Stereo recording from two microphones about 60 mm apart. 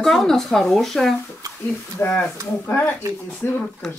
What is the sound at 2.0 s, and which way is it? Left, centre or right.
Speech, left.